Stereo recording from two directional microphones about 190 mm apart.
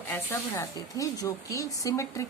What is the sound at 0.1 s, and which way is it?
A woman's voice, 15° left (ahead or behind).